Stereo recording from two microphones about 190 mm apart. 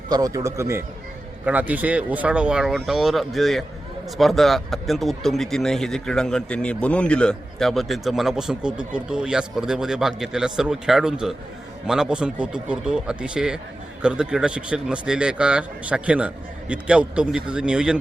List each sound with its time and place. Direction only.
0.1 s a man's voice: 20° right (ahead or behind)